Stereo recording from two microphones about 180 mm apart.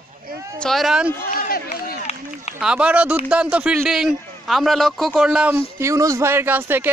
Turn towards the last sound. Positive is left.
turn(degrees=-10)  # may be behind; listen again after turning